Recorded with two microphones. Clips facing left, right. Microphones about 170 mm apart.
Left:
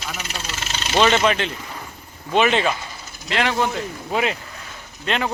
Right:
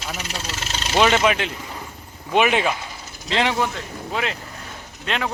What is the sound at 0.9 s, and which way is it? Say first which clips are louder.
Speech: even; 5° right (ahead or behind).